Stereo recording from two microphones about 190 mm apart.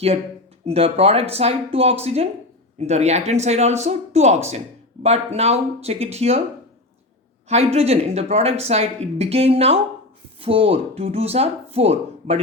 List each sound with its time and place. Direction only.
0.6 s speech: 30° right (ahead or behind)
7.4 s speech: 35° right (ahead or behind)